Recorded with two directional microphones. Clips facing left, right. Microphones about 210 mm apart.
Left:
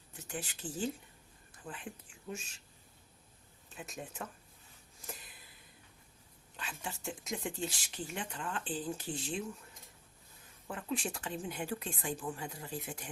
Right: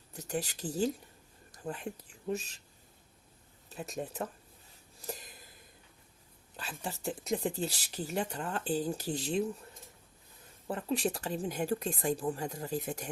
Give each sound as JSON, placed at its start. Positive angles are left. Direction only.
{"t": 0.1, "sound": "speech", "side_deg": -40}
{"t": 3.7, "sound": "speech", "side_deg": -35}
{"t": 4.9, "sound": "a sound", "side_deg": -40}
{"t": 6.6, "sound": "speech", "side_deg": -35}
{"t": 10.7, "sound": "speech", "side_deg": -35}